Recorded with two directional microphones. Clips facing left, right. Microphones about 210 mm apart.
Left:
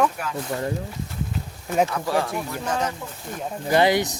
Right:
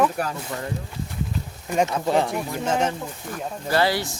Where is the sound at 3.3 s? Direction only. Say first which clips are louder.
Left 3 dB; 20° left (ahead or behind).